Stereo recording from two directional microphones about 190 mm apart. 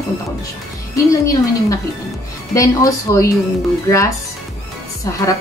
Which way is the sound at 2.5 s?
15° left (ahead or behind).